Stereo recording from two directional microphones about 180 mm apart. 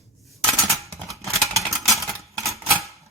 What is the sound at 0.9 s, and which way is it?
Scissors, 15° right (ahead or behind).